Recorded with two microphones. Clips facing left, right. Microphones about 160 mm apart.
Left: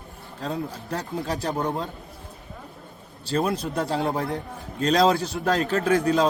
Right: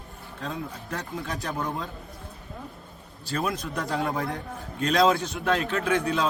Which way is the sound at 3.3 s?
35° left (ahead or behind).